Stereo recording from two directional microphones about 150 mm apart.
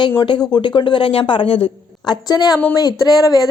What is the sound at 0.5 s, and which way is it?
A woman's voice, 30° left (ahead or behind).